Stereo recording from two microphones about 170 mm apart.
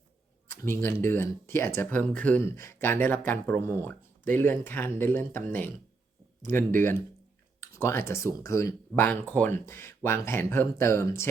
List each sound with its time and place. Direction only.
0.4 s speech: 10° left (ahead or behind)